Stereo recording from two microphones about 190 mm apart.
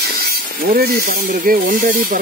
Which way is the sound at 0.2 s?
50° right (ahead or behind).